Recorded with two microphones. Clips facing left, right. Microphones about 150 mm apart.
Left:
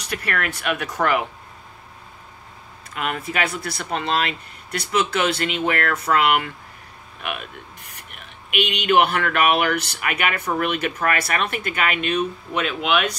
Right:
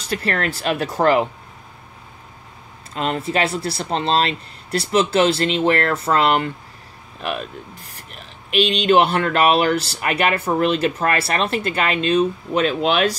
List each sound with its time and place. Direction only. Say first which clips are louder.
0.0 s speech: right 4 dB; 30° right (ahead or behind)
2.9 s speech: right 5 dB; 30° right (ahead or behind)